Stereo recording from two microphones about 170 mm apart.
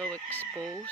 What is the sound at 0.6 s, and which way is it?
Speech, 15° right (ahead or behind).